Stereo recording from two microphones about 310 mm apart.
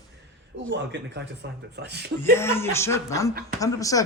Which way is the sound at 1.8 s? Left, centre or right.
Right.